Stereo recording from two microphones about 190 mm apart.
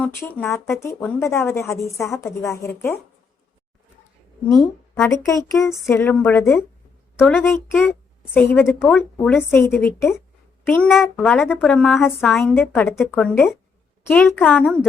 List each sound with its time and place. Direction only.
0.0 s a woman's voice: 10° left (ahead or behind)
5.1 s a woman's voice: 15° left (ahead or behind)
8.7 s a woman's voice: centre (ahead or behind)
9.2 s a woman's voice: 10° left (ahead or behind)
9.7 s a woman's voice: centre (ahead or behind)